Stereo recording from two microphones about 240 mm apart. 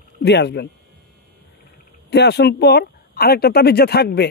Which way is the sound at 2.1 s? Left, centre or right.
Left.